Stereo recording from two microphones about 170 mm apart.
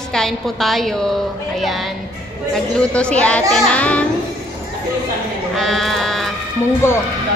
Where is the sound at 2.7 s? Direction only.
5° left (ahead or behind).